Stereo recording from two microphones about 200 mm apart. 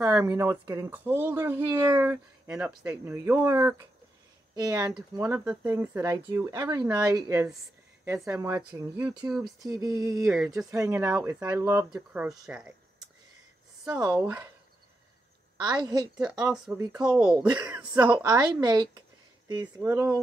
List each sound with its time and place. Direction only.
0.0 s speech: 10° right (ahead or behind)
8.0 s speech: 5° right (ahead or behind)
9.1 s a woman's voice: 20° right (ahead or behind)
9.4 s speech: centre (ahead or behind)
9.8 s speech: 15° right (ahead or behind)
13.8 s speech: 5° right (ahead or behind)
15.6 s a woman's voice: 20° right (ahead or behind)
18.2 s a woman's voice: 20° right (ahead or behind)